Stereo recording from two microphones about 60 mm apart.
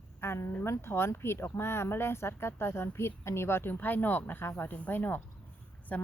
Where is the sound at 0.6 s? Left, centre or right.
Left.